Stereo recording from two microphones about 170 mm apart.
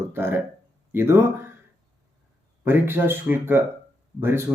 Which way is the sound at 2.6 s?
15° right (ahead or behind).